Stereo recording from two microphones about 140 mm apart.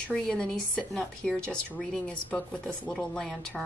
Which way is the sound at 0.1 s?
5° left (ahead or behind).